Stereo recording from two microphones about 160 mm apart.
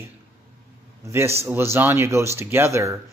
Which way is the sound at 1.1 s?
15° right (ahead or behind).